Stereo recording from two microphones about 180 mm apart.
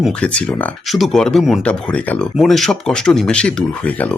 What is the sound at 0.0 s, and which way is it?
Speech, 5° left (ahead or behind).